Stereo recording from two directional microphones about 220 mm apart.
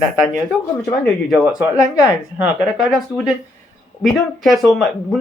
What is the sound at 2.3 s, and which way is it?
Speech, 5° right (ahead or behind).